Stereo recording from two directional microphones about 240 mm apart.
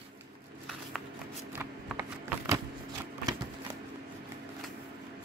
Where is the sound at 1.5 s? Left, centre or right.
Centre.